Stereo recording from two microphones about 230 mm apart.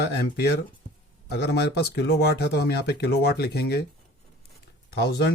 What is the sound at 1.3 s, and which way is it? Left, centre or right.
Speech, left.